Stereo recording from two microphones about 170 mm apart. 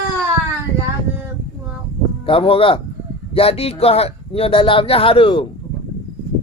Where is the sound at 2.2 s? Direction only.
35° left (ahead or behind).